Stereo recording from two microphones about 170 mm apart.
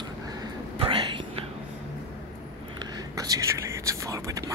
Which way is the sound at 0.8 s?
30° right (ahead or behind).